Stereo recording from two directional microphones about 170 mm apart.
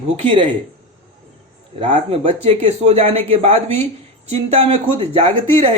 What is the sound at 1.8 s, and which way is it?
Speech, 35° right (ahead or behind).